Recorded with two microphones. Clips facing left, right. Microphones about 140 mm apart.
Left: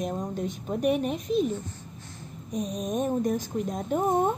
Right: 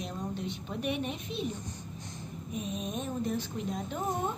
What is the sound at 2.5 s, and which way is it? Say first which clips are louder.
Speech: left 7 dB; 40° left (ahead or behind).